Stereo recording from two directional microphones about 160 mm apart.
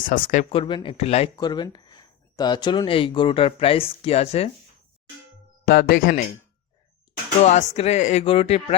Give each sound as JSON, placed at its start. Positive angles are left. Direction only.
{"t": 0.0, "sound": "speech", "side_deg": 55}
{"t": 0.5, "sound": "speech", "side_deg": 35}
{"t": 1.4, "sound": "speech", "side_deg": 25}
{"t": 5.6, "sound": "speech", "side_deg": 65}
{"t": 7.4, "sound": "speech", "side_deg": 45}
{"t": 8.2, "sound": "speech", "side_deg": 35}